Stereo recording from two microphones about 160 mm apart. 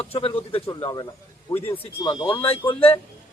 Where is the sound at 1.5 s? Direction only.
15° left (ahead or behind).